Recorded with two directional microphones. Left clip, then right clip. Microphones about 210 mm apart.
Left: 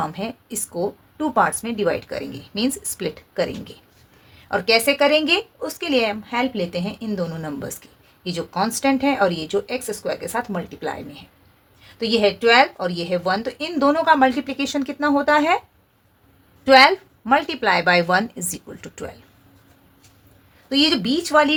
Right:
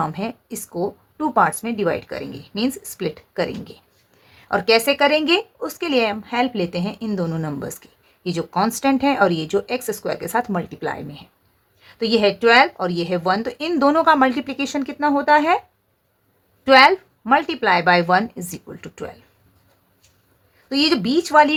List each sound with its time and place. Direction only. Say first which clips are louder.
0.0 s a woman's voice: right 2 dB; 20° right (ahead or behind)
16.6 s a woman's voice: right 1 dB; 15° right (ahead or behind)
20.7 s speech: even; 20° right (ahead or behind)